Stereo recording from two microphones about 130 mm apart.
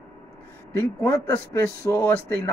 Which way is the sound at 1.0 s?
20° left (ahead or behind).